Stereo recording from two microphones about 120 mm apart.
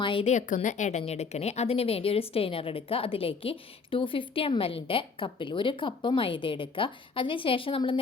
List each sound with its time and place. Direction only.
0.0 s a woman's voice: 45° left (ahead or behind)
0.3 s a woman's voice: 85° left; by 7.9 s 50° left (ahead or behind)